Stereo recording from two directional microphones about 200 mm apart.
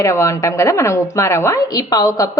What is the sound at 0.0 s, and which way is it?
A woman's voice, 15° left (ahead or behind).